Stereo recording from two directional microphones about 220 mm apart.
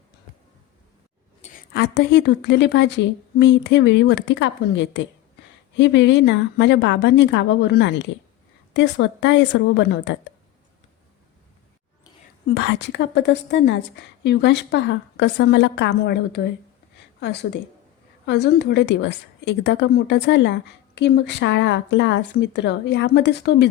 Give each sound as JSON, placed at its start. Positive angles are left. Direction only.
{"t": 1.7, "sound": "a woman's voice", "side_deg": 50}
{"t": 12.5, "sound": "a woman's voice", "side_deg": 50}